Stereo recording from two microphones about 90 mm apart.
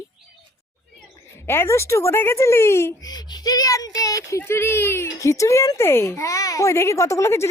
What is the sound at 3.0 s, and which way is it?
Speech, 45° left (ahead or behind).